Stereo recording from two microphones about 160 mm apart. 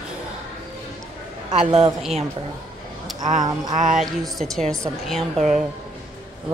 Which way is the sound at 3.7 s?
50° right (ahead or behind).